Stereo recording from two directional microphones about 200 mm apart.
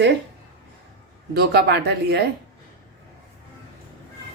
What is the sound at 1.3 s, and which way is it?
Speech, 55° right (ahead or behind).